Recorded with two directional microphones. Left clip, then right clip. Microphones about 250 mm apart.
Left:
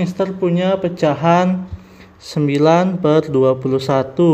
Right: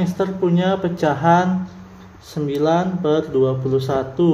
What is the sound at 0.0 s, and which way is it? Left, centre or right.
A man's voice, left.